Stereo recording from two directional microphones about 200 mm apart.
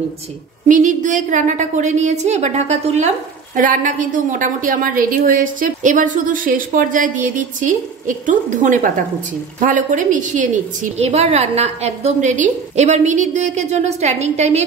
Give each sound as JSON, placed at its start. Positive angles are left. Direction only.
{"t": 0.7, "sound": "a woman's voice", "side_deg": -40}